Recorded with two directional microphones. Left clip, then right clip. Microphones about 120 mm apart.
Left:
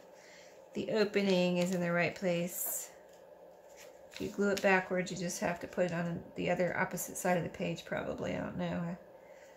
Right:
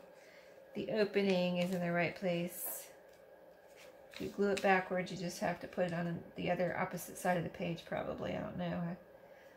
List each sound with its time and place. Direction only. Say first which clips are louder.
0.7 s speech: left 2 dB; 50° left (ahead or behind)
4.6 s speech: left 3 dB; 55° left (ahead or behind)